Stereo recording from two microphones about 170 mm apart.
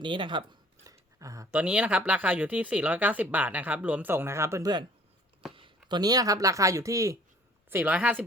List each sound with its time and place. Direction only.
0.0 s speech: 30° right (ahead or behind)
0.9 s a sound: 20° right (ahead or behind)
1.5 s speech: 5° right (ahead or behind)